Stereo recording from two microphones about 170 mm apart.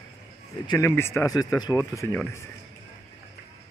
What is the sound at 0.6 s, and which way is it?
Speech, 15° left (ahead or behind).